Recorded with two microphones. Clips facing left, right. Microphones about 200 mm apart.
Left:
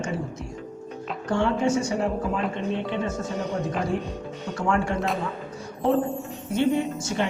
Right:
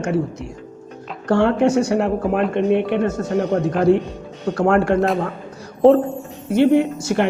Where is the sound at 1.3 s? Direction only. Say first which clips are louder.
Right 7 dB; 65° right (ahead or behind).